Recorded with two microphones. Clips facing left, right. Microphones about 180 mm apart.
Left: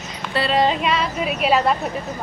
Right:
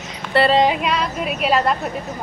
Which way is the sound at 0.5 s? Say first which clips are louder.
Left 1 dB; 15° right (ahead or behind).